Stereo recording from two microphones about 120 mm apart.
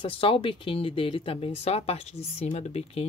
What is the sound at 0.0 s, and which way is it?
Speech, 50° left (ahead or behind).